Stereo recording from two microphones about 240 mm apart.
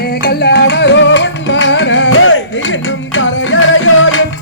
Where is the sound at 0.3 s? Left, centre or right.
Left.